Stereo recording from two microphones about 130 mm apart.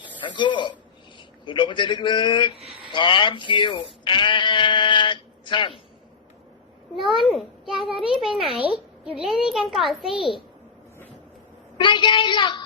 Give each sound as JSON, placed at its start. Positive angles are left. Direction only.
{"t": 0.3, "sound": "speech", "side_deg": 35}
{"t": 7.0, "sound": "a child's voice", "side_deg": 0}
{"t": 11.8, "sound": "speech", "side_deg": 40}